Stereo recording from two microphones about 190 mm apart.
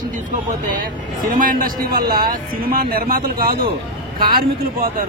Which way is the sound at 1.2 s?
45° right (ahead or behind).